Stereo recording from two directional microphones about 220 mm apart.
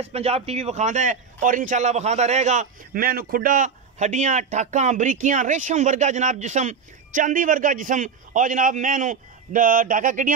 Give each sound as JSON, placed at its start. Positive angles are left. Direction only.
{"t": 0.0, "sound": "a man's voice", "side_deg": -30}